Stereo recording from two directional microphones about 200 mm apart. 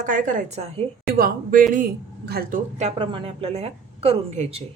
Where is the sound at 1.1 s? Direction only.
45° right (ahead or behind).